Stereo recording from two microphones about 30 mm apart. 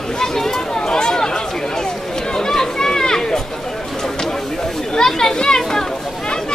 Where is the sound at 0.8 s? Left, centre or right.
Left.